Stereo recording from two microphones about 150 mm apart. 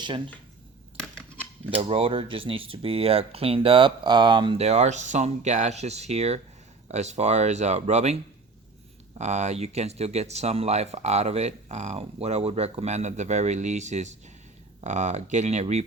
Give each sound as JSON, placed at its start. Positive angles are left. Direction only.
{"t": 1.7, "sound": "speech", "side_deg": -40}